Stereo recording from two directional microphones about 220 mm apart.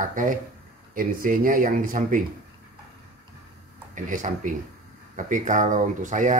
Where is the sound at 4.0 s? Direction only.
35° right (ahead or behind).